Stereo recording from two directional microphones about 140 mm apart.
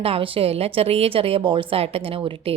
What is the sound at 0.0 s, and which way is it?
Speech, 45° right (ahead or behind).